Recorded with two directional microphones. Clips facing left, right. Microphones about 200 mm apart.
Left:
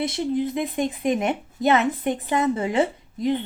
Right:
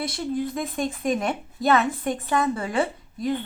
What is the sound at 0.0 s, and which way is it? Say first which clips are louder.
Speech: left 3 dB; 20° left (ahead or behind).